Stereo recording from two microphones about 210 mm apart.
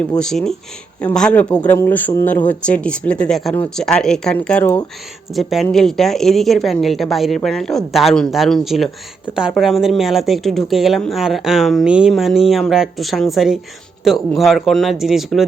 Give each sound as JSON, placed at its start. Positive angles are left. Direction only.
{"t": 0.2, "sound": "speech", "side_deg": 0}